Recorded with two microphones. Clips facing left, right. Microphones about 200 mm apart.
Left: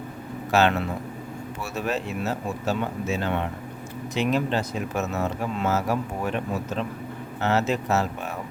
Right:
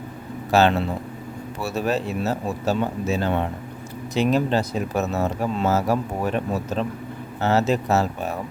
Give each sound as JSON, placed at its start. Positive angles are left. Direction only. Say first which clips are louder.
{"t": 0.5, "sound": "speech", "louder": "right 3 dB", "side_deg": -30}